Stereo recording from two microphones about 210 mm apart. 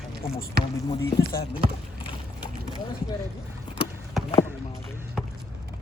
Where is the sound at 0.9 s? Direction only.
20° left (ahead or behind).